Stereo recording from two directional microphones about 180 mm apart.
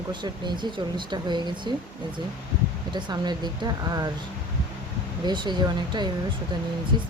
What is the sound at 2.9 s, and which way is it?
Speech, 25° right (ahead or behind).